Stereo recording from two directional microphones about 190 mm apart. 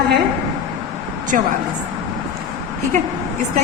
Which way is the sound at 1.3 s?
45° right (ahead or behind).